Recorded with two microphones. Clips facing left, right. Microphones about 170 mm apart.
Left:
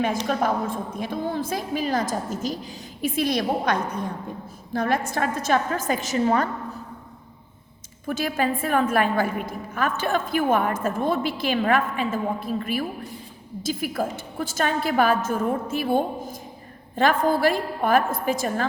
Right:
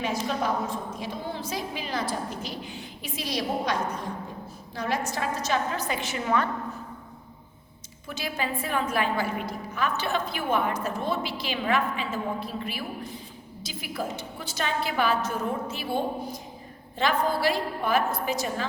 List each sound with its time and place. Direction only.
0.3 s a woman's voice: 50° left (ahead or behind)
8.0 s a woman's voice: 50° left (ahead or behind)